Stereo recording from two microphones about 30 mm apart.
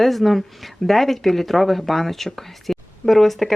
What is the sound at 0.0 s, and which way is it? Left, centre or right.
Speech, centre.